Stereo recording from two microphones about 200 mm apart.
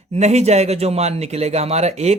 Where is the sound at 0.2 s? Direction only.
35° right (ahead or behind).